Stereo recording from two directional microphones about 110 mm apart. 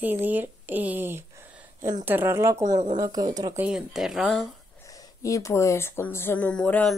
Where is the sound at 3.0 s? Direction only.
35° right (ahead or behind).